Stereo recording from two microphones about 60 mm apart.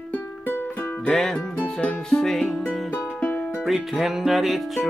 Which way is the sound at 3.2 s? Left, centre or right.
Left.